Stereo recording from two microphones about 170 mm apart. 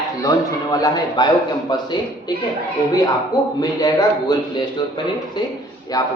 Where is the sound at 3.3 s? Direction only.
20° left (ahead or behind).